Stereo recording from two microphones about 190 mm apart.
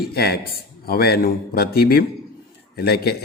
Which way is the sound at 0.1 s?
55° left (ahead or behind).